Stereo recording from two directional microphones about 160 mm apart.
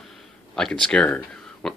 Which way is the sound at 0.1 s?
5° left (ahead or behind).